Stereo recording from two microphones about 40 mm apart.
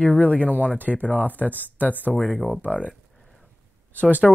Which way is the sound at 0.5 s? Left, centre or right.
Right.